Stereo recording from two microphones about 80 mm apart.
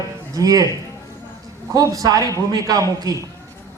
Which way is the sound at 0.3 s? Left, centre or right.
Right.